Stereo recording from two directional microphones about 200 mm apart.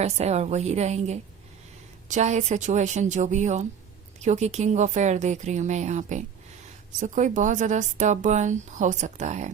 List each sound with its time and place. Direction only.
0.0 s speech: 35° right (ahead or behind)